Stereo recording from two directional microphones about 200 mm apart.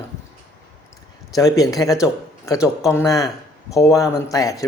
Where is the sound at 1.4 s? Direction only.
15° left (ahead or behind).